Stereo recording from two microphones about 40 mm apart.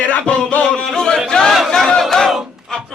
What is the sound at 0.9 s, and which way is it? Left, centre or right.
Speech, centre.